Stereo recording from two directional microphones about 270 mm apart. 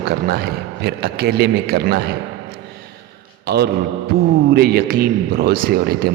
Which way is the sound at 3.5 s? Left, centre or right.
Right.